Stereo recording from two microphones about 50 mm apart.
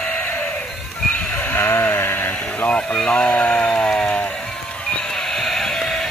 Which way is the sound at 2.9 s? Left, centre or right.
Left.